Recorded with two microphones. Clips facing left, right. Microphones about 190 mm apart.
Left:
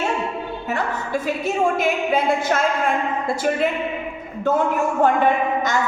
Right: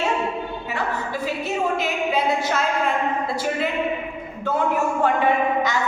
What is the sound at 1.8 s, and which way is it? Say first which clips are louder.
Speech: left 3 dB; 50° left (ahead or behind).